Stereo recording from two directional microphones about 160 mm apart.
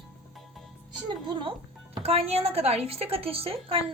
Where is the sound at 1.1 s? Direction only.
30° right (ahead or behind).